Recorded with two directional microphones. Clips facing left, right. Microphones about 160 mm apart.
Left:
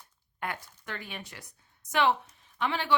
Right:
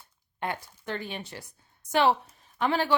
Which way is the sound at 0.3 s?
30° right (ahead or behind).